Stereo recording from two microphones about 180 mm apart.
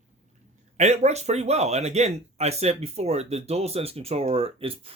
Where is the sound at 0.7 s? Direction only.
40° right (ahead or behind).